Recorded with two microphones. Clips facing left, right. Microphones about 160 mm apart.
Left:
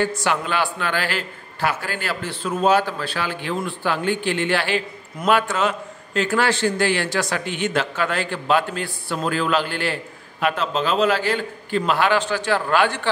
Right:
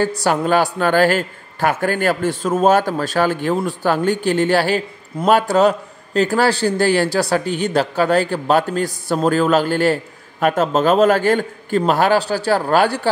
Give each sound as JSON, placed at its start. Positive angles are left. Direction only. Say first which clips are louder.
{"t": 0.0, "sound": "a man's voice", "louder": "right 5 dB", "side_deg": -40}